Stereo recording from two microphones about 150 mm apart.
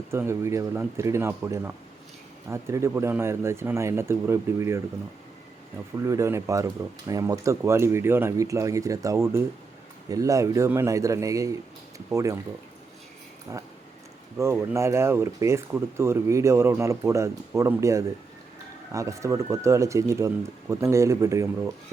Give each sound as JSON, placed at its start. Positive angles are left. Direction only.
{"t": 0.1, "sound": "speech", "side_deg": -15}
{"t": 6.0, "sound": "speech", "side_deg": -20}
{"t": 13.5, "sound": "speech", "side_deg": -20}